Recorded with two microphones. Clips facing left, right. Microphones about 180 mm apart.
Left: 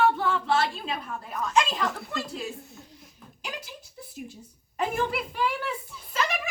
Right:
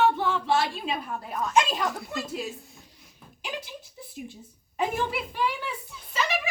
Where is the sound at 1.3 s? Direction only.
25° right (ahead or behind).